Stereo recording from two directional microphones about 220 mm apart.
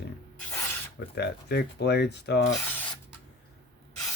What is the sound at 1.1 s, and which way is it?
Speech, 45° left (ahead or behind).